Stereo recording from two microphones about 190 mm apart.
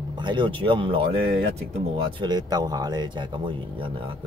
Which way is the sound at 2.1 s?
20° right (ahead or behind).